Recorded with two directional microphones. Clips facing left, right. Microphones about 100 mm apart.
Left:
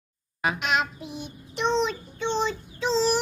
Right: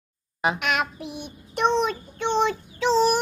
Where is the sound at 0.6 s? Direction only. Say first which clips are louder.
Right 1 dB; 55° right (ahead or behind).